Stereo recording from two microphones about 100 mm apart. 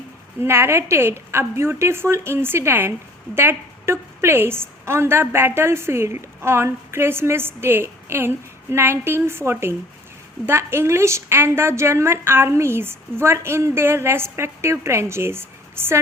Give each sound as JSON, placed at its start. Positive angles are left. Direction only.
{"t": 0.3, "sound": "a woman's voice", "side_deg": -25}